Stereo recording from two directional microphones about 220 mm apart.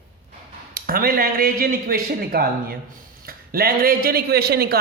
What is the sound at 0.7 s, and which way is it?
A man's voice, 40° right (ahead or behind).